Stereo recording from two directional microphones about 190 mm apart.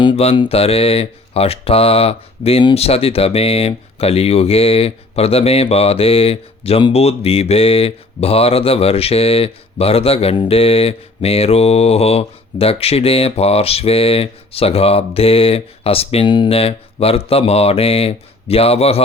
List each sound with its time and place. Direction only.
0.0 s speech: 30° left (ahead or behind)